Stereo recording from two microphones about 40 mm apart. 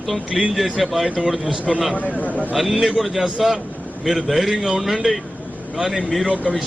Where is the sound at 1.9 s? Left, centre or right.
Left.